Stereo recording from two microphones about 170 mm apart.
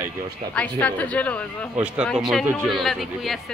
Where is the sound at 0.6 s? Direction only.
10° left (ahead or behind).